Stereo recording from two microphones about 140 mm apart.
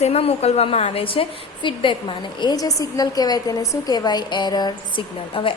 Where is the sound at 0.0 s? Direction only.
45° left (ahead or behind).